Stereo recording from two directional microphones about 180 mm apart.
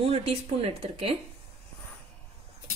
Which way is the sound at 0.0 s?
35° right (ahead or behind).